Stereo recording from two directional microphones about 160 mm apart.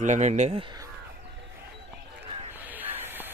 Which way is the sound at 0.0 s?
50° right (ahead or behind).